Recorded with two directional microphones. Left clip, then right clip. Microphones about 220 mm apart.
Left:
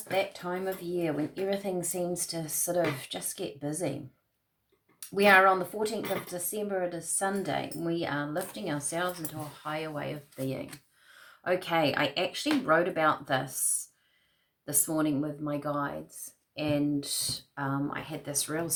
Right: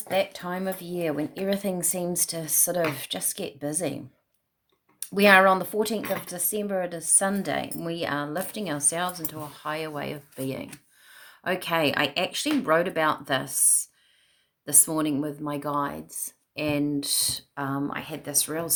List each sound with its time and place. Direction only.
0.1 s speech: 50° right (ahead or behind)